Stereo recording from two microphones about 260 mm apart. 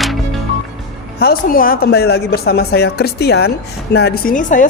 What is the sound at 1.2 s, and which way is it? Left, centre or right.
A woman's voice, left.